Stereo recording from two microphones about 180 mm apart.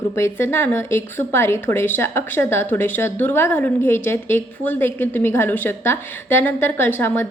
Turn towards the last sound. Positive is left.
turn(degrees=10)  # may be behind; listen again after turning